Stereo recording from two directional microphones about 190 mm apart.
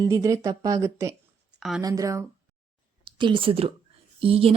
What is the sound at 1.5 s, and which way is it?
Speech, centre (ahead or behind).